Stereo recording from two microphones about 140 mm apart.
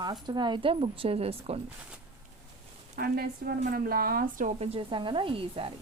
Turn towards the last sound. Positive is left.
turn(degrees=-40)  # may be behind; listen again after turning